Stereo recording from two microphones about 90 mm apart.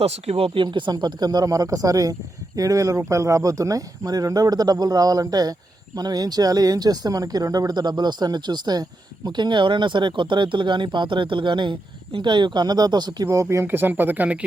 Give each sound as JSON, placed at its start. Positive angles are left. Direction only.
{"t": 0.3, "sound": "speech", "side_deg": -80}
{"t": 13.2, "sound": "speech", "side_deg": -35}